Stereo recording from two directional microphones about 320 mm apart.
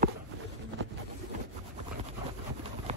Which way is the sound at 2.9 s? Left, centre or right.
Centre.